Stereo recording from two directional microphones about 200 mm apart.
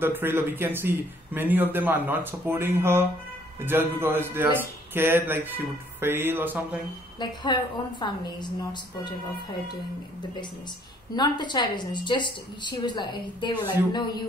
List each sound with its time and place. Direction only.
0.0 s a man's voice: 10° right (ahead or behind)
7.5 s a woman's voice: 20° left (ahead or behind)
11.1 s a woman's voice: 20° left (ahead or behind)